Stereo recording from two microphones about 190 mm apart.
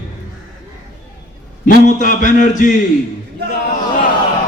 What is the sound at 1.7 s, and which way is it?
A man's voice, 45° left (ahead or behind).